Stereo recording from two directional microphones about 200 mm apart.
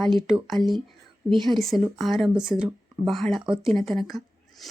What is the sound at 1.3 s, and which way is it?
Speech, 20° right (ahead or behind).